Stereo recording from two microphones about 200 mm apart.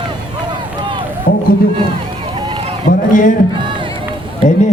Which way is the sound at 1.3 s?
45° left (ahead or behind).